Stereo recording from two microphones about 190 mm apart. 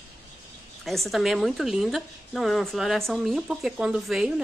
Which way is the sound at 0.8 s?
Centre (ahead or behind).